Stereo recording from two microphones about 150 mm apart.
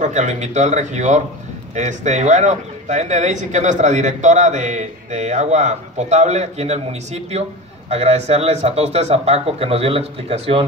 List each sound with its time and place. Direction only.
0.0 s speech: 50° right (ahead or behind)